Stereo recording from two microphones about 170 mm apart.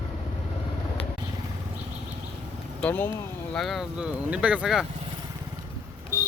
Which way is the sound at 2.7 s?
10° left (ahead or behind).